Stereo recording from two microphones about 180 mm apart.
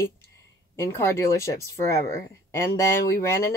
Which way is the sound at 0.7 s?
15° left (ahead or behind).